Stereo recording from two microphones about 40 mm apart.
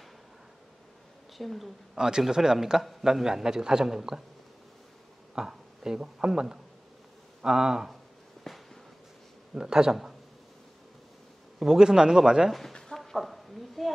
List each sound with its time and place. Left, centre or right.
1.4 s a woman's voice: centre
2.0 s a man's voice: centre
5.3 s a man's voice: centre
8.5 s a sound: centre
9.5 s a man's voice: centre
11.6 s a man's voice: centre
12.4 s a woman's voice: centre
12.9 s a sound: centre